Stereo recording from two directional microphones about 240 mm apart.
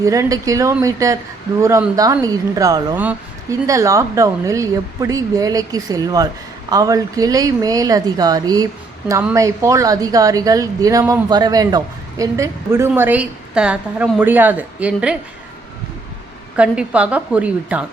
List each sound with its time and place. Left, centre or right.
0.0 s speech: centre
16.6 s a woman's voice: centre